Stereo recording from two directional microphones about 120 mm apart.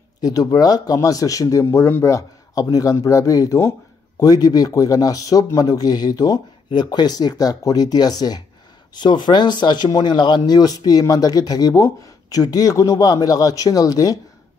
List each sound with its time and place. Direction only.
0.2 s speech: 30° left (ahead or behind)